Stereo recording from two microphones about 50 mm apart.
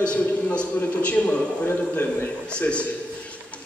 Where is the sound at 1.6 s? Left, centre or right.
Left.